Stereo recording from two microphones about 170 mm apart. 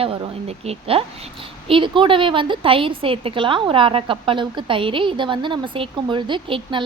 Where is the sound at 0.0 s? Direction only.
35° right (ahead or behind).